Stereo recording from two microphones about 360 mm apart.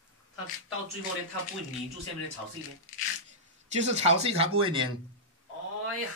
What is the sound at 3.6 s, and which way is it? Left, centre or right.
A man's voice, centre.